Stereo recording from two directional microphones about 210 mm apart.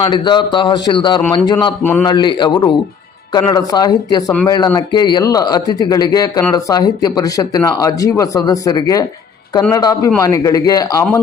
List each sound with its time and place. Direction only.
0.1 s speech: 20° left (ahead or behind)
1.8 s speech: 10° left (ahead or behind)
2.0 s speech: 20° left (ahead or behind)